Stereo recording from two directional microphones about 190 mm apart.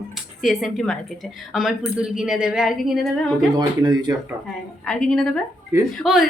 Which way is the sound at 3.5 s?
20° right (ahead or behind).